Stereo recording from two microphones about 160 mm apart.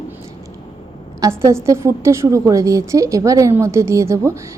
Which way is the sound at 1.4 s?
15° right (ahead or behind).